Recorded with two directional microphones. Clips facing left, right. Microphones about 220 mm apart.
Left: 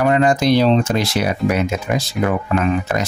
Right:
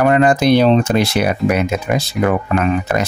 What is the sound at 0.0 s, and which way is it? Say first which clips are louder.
Speech: right 2 dB; 55° right (ahead or behind).